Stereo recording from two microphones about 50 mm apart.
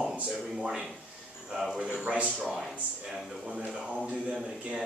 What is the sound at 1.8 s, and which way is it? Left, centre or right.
Speech, right.